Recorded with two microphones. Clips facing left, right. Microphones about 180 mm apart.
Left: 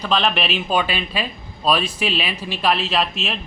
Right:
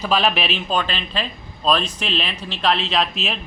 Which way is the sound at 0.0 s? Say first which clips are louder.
Right 1 dB; 5° right (ahead or behind).